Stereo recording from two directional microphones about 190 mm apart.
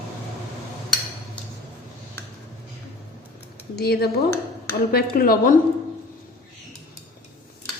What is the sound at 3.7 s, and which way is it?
A woman's voice, 55° left (ahead or behind).